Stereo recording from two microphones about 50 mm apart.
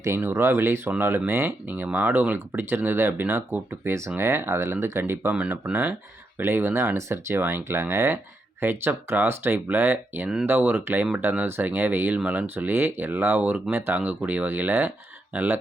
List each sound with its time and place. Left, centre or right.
0.3 s speech: right
4.2 s speech: right
5.3 s speech: right
6.3 s speech: right
6.9 s speech: right
7.3 s speech: right
8.6 s speech: right
9.6 s speech: right
14.0 s speech: right
15.3 s speech: right